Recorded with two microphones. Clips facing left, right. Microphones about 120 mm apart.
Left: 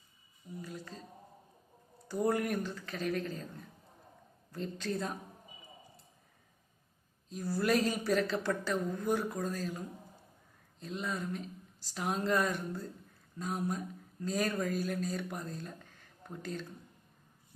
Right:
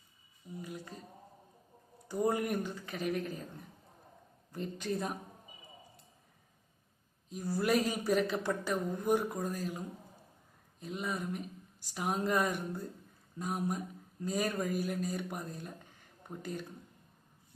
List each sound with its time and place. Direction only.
0.6 s a sound: 15° right (ahead or behind)
2.0 s speech: 15° right (ahead or behind)
4.5 s speech: 15° right (ahead or behind)
7.3 s speech: 15° right (ahead or behind)